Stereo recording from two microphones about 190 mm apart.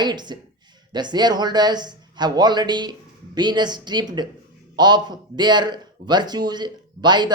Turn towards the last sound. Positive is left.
turn(degrees=-25)  # may be behind; listen again after turning